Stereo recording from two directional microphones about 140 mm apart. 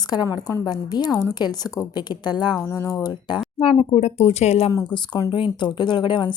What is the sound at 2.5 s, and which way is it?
Speech, 20° left (ahead or behind).